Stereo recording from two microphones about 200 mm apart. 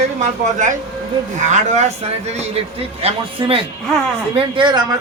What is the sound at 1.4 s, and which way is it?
A man's voice, 35° right (ahead or behind).